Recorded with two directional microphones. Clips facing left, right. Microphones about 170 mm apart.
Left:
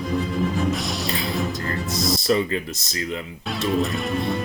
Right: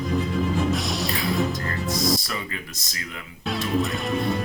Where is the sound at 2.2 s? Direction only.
30° left (ahead or behind).